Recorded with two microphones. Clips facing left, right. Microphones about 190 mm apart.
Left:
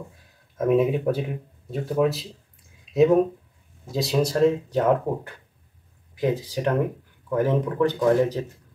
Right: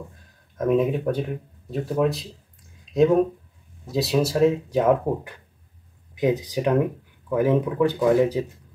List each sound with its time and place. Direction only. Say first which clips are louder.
0.1 s speech: right 1 dB; 5° left (ahead or behind)
2.8 s a sound: even; 5° left (ahead or behind)
3.8 s speech: right 1 dB; centre (ahead or behind)